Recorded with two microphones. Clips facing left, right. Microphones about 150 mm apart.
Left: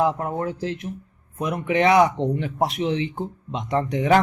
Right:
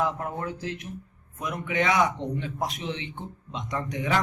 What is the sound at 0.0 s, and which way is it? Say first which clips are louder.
A man's voice: left 6 dB; 35° left (ahead or behind).